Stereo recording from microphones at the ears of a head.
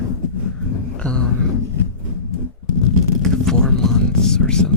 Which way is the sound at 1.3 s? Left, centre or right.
Left.